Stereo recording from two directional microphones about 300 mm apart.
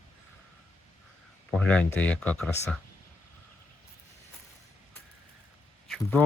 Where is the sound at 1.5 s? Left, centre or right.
Centre.